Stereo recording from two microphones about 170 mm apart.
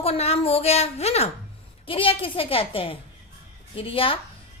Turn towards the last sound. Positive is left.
turn(degrees=30)  # may be behind; listen again after turning